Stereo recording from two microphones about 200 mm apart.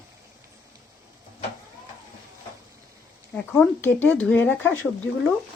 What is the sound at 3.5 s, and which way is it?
Speech, 10° left (ahead or behind).